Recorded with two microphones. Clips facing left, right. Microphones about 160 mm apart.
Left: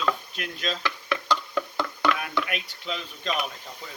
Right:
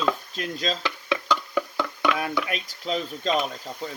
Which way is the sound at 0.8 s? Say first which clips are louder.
Right 2 dB; 15° right (ahead or behind).